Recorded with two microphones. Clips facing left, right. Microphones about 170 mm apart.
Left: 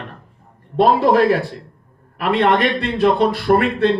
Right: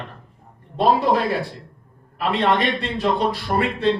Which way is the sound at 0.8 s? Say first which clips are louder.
Left 5 dB; 60° left (ahead or behind).